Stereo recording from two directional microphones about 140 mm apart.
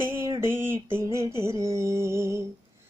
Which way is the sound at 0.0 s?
20° right (ahead or behind).